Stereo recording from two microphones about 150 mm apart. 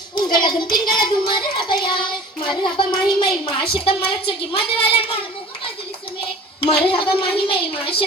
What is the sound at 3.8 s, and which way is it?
Child singing, 35° left (ahead or behind).